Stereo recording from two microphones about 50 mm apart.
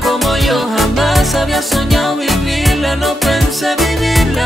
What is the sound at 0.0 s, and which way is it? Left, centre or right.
Music, centre.